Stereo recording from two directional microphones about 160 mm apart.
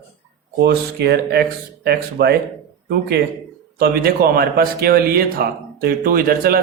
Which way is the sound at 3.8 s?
70° right (ahead or behind).